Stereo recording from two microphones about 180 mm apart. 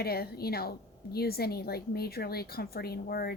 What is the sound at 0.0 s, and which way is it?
A woman's voice, 60° left (ahead or behind).